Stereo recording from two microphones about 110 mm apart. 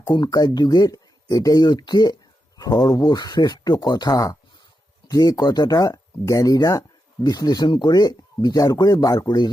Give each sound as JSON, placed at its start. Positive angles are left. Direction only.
{"t": 0.1, "sound": "speech", "side_deg": 40}